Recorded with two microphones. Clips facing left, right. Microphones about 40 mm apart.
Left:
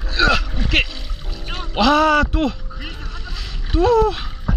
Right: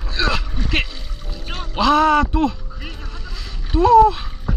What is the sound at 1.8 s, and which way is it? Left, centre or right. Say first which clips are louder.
Speech: even; left.